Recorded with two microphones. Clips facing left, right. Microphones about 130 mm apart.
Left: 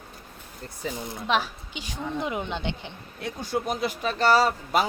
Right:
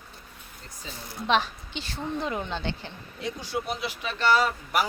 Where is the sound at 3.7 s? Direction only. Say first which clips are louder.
Left 5 dB; 45° left (ahead or behind).